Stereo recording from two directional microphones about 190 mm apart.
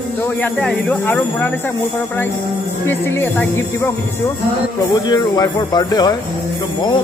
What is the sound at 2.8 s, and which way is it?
Speech, 10° left (ahead or behind).